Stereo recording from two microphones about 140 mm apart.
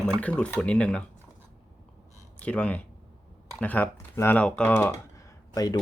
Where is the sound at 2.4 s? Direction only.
10° left (ahead or behind).